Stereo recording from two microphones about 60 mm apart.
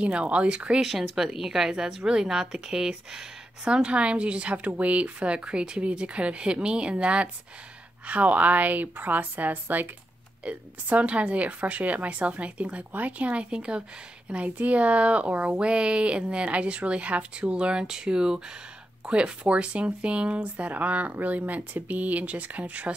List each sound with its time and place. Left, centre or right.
0.0 s speech: centre